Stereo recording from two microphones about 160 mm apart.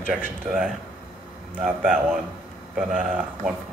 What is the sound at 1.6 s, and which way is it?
A man's voice, 5° right (ahead or behind).